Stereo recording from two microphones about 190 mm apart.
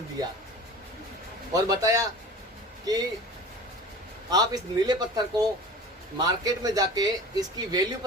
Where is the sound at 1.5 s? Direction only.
20° right (ahead or behind).